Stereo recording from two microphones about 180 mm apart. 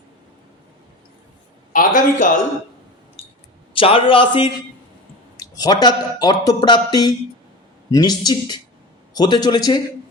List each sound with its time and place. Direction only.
1.7 s a man's voice: 50° left (ahead or behind)
3.8 s a man's voice: 30° left (ahead or behind)